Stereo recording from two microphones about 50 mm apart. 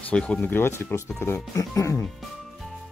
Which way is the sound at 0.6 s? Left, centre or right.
Left.